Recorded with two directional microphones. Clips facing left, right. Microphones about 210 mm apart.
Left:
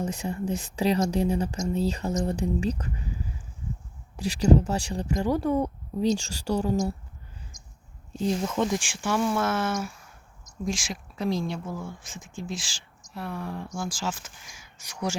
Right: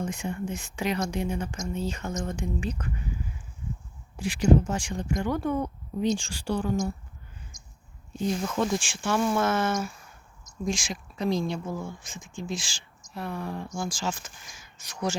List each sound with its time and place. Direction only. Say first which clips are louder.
0.0 s speech: left 2 dB; 35° left (ahead or behind)
4.2 s speech: left 1 dB; 35° left (ahead or behind)
8.6 s speech: even; 15° left (ahead or behind)